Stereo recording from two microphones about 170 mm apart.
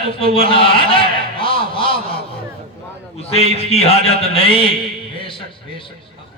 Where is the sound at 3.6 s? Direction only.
35° left (ahead or behind).